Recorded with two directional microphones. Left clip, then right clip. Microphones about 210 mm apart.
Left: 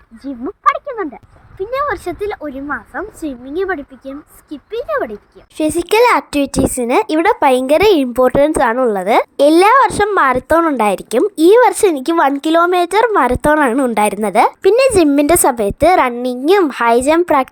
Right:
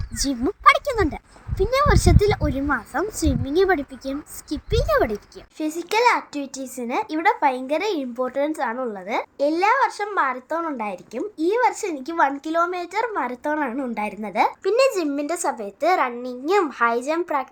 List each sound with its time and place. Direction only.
0.7 s a sound: 25° right (ahead or behind)
1.5 s a woman's voice: centre (ahead or behind)
5.5 s a child's voice: 35° left (ahead or behind)